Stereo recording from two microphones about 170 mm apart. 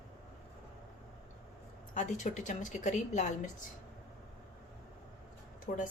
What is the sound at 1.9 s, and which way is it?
A woman's voice, 45° left (ahead or behind).